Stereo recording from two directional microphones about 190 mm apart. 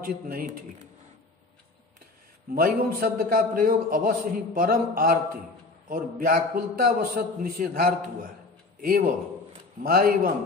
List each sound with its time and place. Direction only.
0.0 s a man's voice: 50° right (ahead or behind)
2.5 s a man's voice: 50° right (ahead or behind)